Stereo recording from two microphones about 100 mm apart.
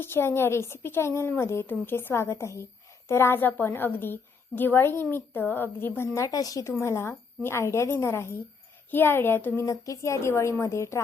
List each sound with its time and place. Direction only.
0.0 s a woman's voice: 25° left (ahead or behind)
9.6 s a woman's voice: 35° left (ahead or behind)